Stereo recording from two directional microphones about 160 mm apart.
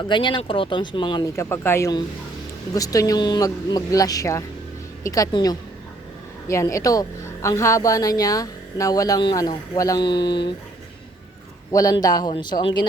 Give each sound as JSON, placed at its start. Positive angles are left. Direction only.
{"t": 0.1, "sound": "speech", "side_deg": 30}
{"t": 11.7, "sound": "speech", "side_deg": 20}